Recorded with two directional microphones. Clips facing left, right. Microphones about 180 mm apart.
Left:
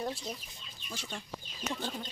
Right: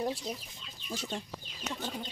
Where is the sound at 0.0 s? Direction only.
15° right (ahead or behind).